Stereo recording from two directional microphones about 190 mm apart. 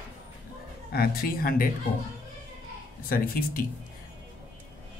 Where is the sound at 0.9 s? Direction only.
50° left (ahead or behind).